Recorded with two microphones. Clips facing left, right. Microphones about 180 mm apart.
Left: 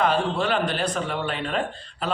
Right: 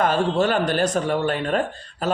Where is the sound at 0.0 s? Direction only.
45° right (ahead or behind).